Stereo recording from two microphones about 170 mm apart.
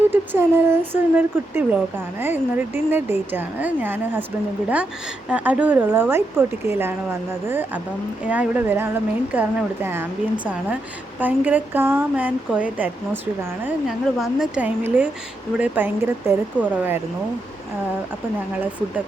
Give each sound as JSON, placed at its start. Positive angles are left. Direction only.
{"t": 0.1, "sound": "speech", "side_deg": -15}
{"t": 5.3, "sound": "speech", "side_deg": -10}